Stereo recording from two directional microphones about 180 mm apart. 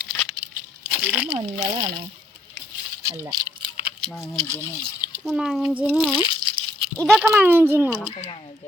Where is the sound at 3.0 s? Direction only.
15° right (ahead or behind).